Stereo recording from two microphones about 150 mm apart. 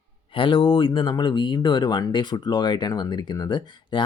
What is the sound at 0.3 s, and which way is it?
Speech, 35° left (ahead or behind).